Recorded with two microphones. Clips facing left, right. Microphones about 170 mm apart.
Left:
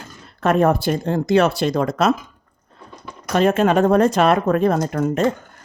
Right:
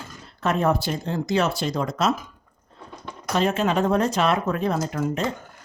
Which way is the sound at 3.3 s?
55° left (ahead or behind).